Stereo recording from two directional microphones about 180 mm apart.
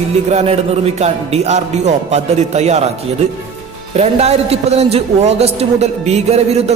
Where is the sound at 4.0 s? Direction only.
35° right (ahead or behind).